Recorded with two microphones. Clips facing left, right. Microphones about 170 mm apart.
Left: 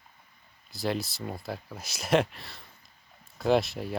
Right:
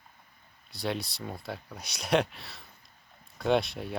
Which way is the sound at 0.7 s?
Centre (ahead or behind).